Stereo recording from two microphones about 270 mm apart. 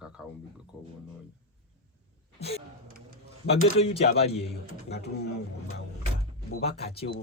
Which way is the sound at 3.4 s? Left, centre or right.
Left.